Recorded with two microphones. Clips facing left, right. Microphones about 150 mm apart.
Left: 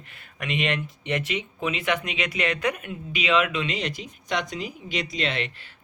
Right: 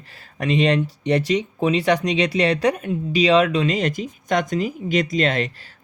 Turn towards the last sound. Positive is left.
turn(degrees=-40)  # may be behind; listen again after turning